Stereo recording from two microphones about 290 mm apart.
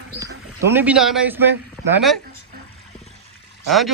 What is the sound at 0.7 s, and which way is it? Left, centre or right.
Speech, centre.